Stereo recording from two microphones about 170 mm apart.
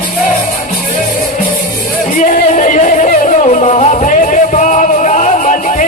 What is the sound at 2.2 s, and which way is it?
Music, 45° left (ahead or behind).